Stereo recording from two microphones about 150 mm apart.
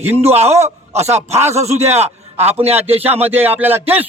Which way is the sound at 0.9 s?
45° right (ahead or behind).